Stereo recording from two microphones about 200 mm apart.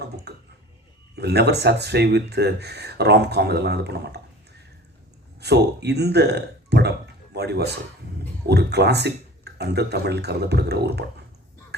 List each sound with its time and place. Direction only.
0.3 s a sound: 55° right (ahead or behind)
1.1 s speech: 55° right (ahead or behind)
5.4 s speech: 55° right (ahead or behind)
11.7 s music: 55° right (ahead or behind)